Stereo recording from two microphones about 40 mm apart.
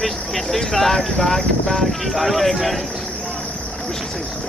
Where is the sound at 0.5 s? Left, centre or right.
Centre.